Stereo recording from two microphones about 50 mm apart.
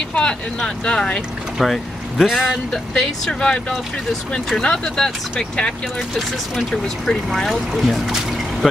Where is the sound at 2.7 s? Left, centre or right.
Centre.